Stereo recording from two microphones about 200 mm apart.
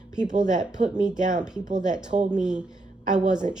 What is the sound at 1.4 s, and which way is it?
Speech, 5° right (ahead or behind).